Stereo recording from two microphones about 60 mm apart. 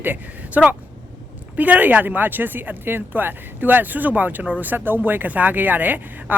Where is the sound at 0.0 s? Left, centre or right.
Right.